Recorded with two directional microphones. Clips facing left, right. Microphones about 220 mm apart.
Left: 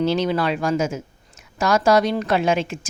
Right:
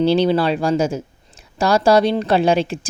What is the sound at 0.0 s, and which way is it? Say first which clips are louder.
A woman's voice: right 5 dB; 30° right (ahead or behind).